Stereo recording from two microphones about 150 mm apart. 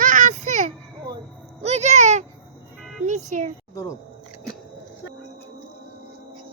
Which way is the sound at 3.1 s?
55° right (ahead or behind).